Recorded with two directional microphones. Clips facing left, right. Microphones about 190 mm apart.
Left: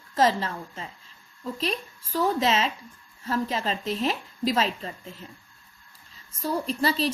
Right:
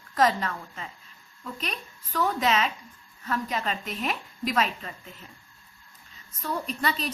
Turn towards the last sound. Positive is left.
turn(degrees=30)  # may be behind; listen again after turning